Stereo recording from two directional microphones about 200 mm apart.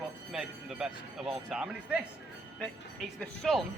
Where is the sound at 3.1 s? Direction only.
Centre (ahead or behind).